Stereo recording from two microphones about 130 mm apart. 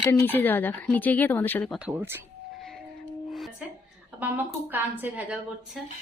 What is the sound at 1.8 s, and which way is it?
Speech, 10° right (ahead or behind).